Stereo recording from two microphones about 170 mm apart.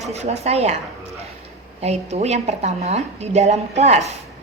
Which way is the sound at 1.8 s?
40° right (ahead or behind).